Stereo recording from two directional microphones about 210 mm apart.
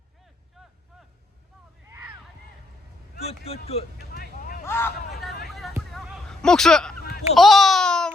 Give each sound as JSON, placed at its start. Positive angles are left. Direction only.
{"t": 0.6, "sound": "vehicle", "side_deg": 0}
{"t": 1.9, "sound": "a sound", "side_deg": -10}
{"t": 3.2, "sound": "speech", "side_deg": 30}
{"t": 4.1, "sound": "vehicle", "side_deg": 45}
{"t": 4.6, "sound": "speech", "side_deg": 10}
{"t": 5.1, "sound": "hubbub", "side_deg": 0}
{"t": 5.5, "sound": "a sound", "side_deg": 0}